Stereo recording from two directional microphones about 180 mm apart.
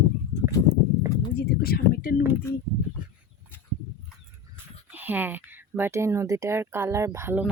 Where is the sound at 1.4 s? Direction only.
60° left (ahead or behind).